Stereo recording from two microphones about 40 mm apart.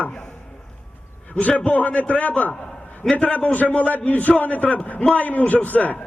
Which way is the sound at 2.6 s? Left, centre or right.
Left.